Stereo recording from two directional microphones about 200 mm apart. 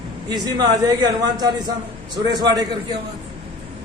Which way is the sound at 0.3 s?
20° right (ahead or behind).